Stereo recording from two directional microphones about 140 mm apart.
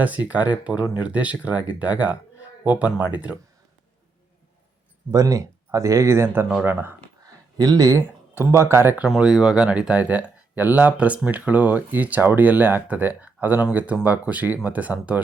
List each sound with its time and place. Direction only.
0.3 s speech: 10° right (ahead or behind)
5.1 s speech: 25° right (ahead or behind)
7.3 s speech: 25° right (ahead or behind)
9.0 s speech: 5° right (ahead or behind)